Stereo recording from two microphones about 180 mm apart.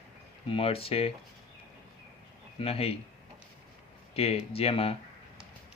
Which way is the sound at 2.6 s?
30° left (ahead or behind).